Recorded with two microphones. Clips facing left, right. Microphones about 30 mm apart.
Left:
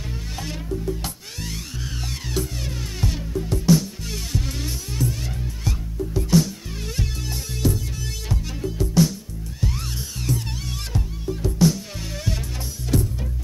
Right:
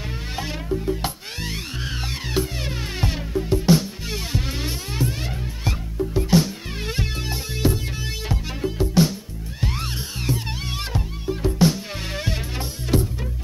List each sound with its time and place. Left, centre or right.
0.4 s music: right
12.9 s music: right